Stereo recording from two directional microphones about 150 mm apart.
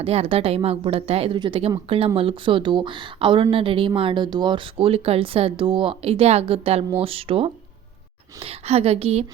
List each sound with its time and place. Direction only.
0.0 s a woman's voice: 40° right (ahead or behind)